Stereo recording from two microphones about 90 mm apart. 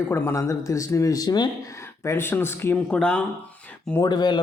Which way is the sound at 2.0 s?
25° left (ahead or behind).